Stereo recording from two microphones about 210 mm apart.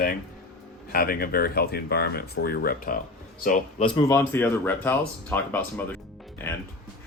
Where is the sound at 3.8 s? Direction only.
20° left (ahead or behind).